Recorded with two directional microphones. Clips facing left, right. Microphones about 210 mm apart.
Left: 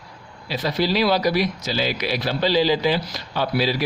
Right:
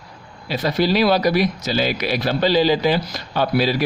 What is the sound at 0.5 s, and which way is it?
Speech, 50° right (ahead or behind).